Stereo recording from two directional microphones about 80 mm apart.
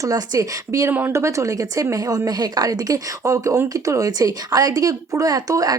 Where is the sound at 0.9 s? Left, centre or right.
Right.